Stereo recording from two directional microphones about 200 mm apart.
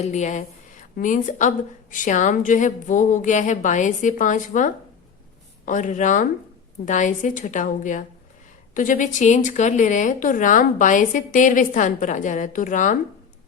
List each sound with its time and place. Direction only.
0.0 s a woman's voice: 35° left (ahead or behind)